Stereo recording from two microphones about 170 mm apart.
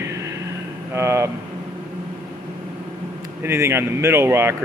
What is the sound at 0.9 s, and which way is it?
Speech, 15° right (ahead or behind).